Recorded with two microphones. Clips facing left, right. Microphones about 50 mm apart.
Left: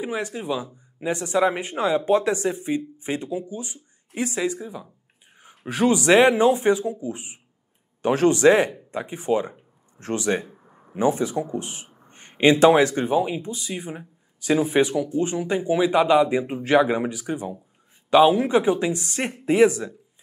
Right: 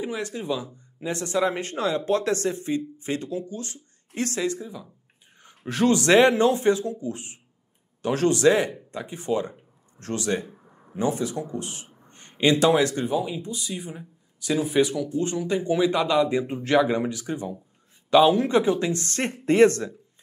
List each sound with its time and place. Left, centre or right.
0.0 s speech: centre
10.5 s a sound: centre
10.9 s speech: left; by 19.9 s centre